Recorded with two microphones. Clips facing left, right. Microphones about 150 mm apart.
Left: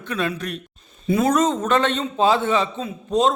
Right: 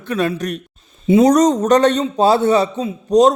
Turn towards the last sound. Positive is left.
turn(degrees=-40)  # may be behind; listen again after turning